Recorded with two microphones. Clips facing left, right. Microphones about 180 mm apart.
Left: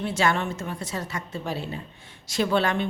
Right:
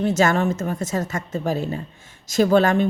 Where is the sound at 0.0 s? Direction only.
45° right (ahead or behind).